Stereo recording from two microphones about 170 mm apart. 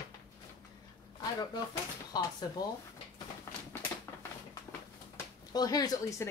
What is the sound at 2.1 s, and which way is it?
Speech, 25° left (ahead or behind).